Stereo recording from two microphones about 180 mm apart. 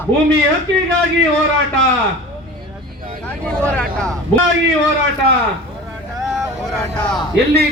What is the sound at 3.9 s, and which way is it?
Speech, 5° left (ahead or behind).